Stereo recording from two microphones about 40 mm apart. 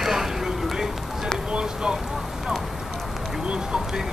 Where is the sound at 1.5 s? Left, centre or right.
Right.